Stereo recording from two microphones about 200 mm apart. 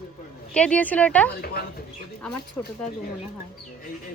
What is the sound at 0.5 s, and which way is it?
Speech, 5° left (ahead or behind).